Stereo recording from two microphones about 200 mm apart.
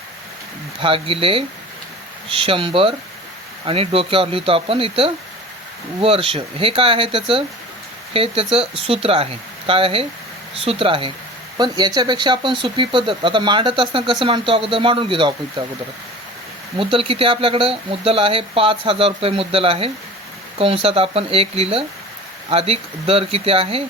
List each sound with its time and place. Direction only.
0.8 s speech: 25° right (ahead or behind)
16.7 s speech: 25° right (ahead or behind)